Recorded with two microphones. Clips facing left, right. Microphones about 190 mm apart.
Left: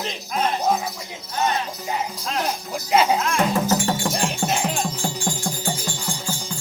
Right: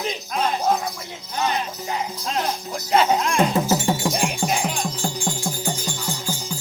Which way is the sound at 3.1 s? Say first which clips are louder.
Right 1 dB; 15° right (ahead or behind).